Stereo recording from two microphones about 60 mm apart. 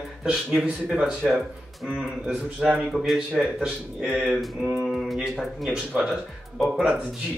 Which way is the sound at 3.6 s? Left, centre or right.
Centre.